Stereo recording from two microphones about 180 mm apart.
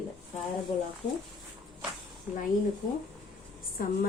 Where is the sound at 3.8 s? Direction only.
55° left (ahead or behind).